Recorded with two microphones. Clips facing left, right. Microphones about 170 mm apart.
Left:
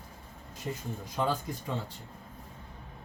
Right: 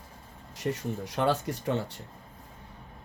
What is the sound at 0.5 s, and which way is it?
Speech, 80° right.